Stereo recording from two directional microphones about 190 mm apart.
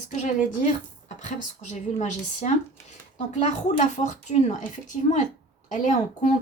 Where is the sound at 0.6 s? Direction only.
40° left (ahead or behind).